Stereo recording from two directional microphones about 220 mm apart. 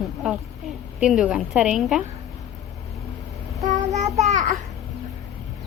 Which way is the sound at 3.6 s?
30° right (ahead or behind).